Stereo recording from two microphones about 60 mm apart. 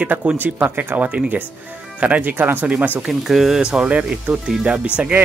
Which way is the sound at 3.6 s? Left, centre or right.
Centre.